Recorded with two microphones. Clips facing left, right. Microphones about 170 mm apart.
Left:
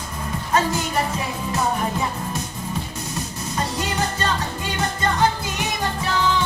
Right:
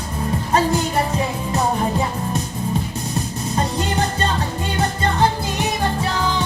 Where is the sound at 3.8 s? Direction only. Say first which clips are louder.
Right 3 dB; 30° right (ahead or behind).